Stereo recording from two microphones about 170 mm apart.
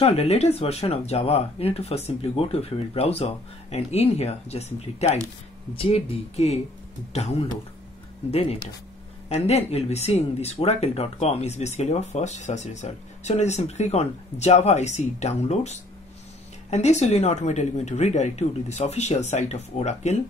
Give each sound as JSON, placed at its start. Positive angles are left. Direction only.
{"t": 0.0, "sound": "speech", "side_deg": 40}
{"t": 5.8, "sound": "speech", "side_deg": 35}